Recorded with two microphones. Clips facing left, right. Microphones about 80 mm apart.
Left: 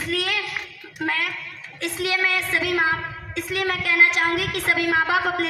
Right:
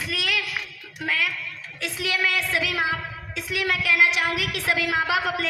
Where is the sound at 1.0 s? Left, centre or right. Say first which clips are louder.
Left 1 dB; left.